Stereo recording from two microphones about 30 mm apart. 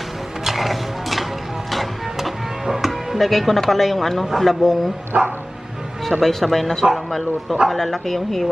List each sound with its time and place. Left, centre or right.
0.4 s music: centre
3.2 s a woman's voice: centre
5.1 s speech: centre
6.1 s a woman's voice: centre